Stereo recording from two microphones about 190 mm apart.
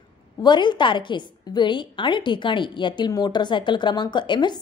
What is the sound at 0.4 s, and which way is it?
A woman's voice, 25° left (ahead or behind).